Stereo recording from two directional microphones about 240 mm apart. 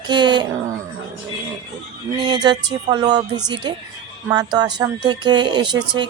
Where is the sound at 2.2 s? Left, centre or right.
Centre.